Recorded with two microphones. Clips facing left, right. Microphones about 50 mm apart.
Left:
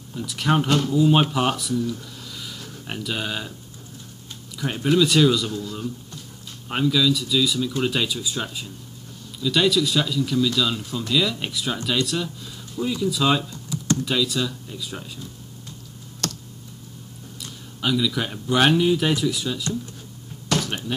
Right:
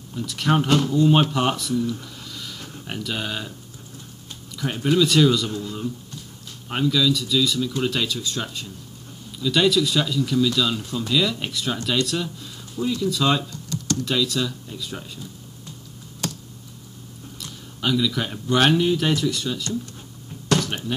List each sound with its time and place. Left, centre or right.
0.1 s speech: centre
4.6 s speech: centre
5.5 s speech: centre
6.7 s speech: centre
17.7 s speech: centre